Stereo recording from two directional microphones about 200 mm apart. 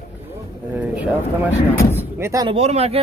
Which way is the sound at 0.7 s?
5° right (ahead or behind).